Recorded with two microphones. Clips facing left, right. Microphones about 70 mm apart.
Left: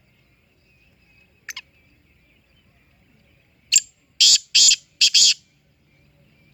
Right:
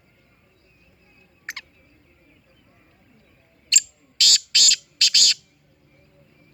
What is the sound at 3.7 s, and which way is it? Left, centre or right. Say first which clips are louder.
Bird: even; right.